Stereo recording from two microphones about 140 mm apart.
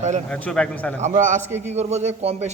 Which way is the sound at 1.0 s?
60° right (ahead or behind).